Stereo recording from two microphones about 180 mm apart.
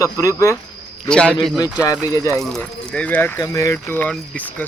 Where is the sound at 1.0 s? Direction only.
5° left (ahead or behind).